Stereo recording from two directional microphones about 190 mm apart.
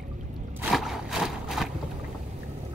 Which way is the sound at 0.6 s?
Centre (ahead or behind).